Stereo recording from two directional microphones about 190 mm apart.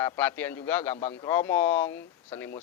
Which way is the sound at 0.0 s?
10° left (ahead or behind).